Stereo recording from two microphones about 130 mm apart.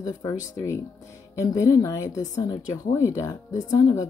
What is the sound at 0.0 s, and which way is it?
Speech, 30° left (ahead or behind).